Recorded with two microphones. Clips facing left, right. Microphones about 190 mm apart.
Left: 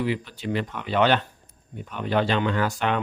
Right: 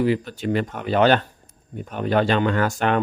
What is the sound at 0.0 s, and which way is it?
Speech, 45° right (ahead or behind).